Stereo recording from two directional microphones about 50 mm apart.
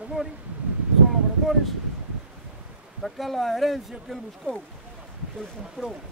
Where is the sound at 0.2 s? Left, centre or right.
Right.